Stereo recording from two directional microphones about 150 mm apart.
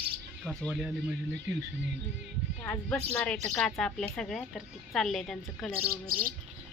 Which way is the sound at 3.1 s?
10° left (ahead or behind).